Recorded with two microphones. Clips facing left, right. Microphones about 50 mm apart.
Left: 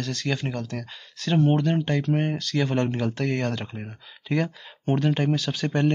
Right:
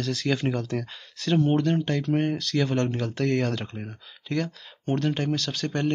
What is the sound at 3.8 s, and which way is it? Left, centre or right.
Speech, centre.